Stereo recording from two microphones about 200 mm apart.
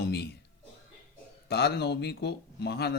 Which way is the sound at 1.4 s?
55° left (ahead or behind).